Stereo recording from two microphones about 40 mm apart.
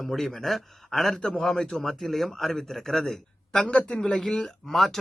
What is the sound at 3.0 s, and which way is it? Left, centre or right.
Speech, left.